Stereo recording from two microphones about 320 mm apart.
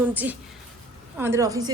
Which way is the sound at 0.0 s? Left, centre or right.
Centre.